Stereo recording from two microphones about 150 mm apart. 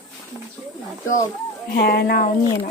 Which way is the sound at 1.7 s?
90° left.